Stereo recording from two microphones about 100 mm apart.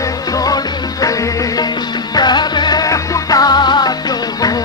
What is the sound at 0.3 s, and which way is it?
Music, 40° left (ahead or behind).